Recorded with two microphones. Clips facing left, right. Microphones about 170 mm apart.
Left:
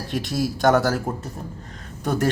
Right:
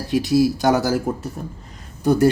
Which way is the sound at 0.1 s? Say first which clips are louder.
Right 9 dB; 5° right (ahead or behind).